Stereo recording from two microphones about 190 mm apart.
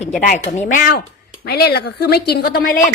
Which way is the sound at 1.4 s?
55° left (ahead or behind).